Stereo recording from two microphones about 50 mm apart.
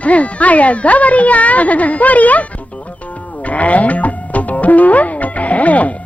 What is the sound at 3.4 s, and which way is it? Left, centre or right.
Music, left.